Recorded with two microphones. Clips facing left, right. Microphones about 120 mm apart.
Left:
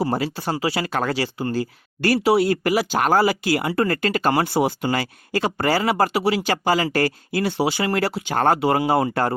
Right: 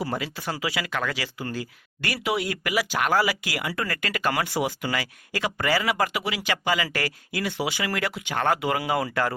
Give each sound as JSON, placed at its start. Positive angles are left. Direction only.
{"t": 0.0, "sound": "speech", "side_deg": 35}